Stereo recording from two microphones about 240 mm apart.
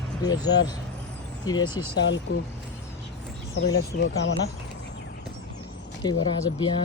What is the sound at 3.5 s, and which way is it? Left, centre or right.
Speech, left.